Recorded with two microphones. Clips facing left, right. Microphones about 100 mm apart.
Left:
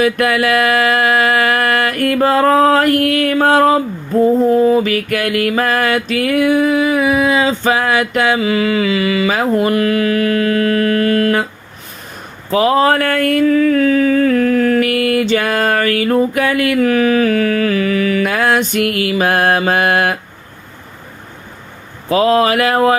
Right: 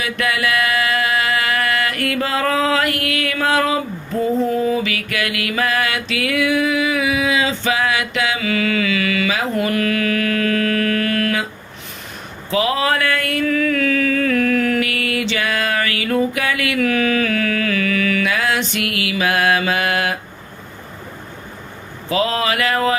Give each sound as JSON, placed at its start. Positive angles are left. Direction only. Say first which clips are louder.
{"t": 0.0, "sound": "music", "louder": "left 7 dB", "side_deg": 45}
{"t": 8.4, "sound": "mantra", "louder": "left 5 dB", "side_deg": 30}
{"t": 12.5, "sound": "a sound", "louder": "left 6 dB", "side_deg": 45}
{"t": 22.1, "sound": "music", "louder": "left 7 dB", "side_deg": 45}